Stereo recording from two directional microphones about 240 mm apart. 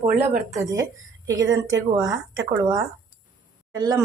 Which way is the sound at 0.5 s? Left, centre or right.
Centre.